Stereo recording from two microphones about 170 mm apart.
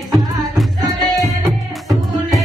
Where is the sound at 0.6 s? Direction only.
Centre (ahead or behind).